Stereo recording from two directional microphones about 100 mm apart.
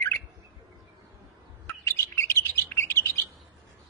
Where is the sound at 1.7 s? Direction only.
25° left (ahead or behind).